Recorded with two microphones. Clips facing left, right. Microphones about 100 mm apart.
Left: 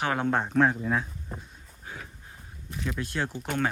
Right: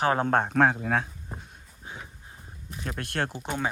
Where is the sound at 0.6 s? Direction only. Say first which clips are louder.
Right 1 dB; 85° right.